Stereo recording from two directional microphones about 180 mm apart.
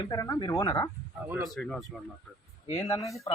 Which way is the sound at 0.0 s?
20° left (ahead or behind).